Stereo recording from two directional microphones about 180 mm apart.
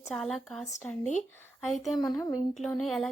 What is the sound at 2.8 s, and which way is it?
Speech, centre (ahead or behind).